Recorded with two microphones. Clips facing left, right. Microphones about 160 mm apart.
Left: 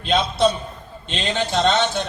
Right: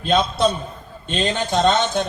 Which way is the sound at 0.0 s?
50° right (ahead or behind).